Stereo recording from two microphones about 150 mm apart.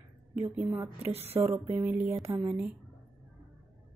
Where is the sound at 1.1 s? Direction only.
40° right (ahead or behind).